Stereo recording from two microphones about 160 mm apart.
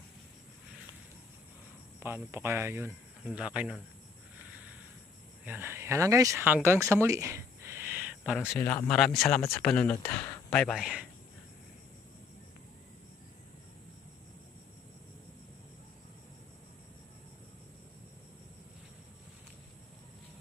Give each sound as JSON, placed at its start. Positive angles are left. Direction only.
{"t": 2.0, "sound": "speech", "side_deg": -15}
{"t": 5.5, "sound": "speech", "side_deg": -15}
{"t": 8.4, "sound": "speech", "side_deg": 10}